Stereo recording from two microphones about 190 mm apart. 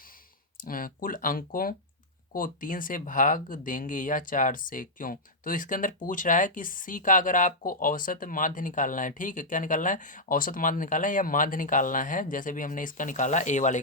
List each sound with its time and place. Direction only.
0.7 s speech: 45° left (ahead or behind)